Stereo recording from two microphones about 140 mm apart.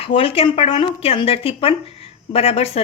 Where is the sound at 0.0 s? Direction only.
40° left (ahead or behind).